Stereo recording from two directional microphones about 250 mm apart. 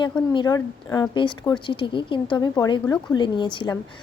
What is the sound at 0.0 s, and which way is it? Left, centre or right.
A woman's voice, centre.